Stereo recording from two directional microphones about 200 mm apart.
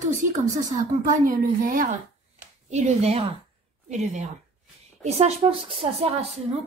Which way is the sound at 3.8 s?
35° right (ahead or behind).